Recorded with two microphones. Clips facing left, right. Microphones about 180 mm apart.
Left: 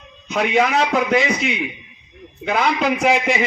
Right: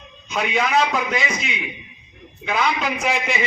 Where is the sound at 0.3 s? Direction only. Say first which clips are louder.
Left 4 dB; 60° left (ahead or behind).